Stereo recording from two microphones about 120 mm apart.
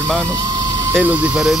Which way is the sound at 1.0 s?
15° right (ahead or behind).